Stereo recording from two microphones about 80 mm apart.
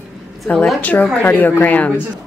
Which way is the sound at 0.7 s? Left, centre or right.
Centre.